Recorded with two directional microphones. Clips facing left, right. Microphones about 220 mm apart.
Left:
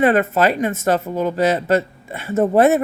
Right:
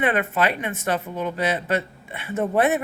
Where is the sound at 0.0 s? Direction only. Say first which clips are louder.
Left 7 dB; 40° left (ahead or behind).